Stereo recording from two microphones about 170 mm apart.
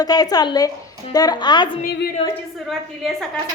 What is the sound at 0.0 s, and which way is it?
Speech, 20° left (ahead or behind).